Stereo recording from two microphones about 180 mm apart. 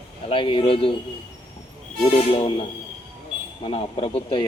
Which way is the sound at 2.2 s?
35° left (ahead or behind).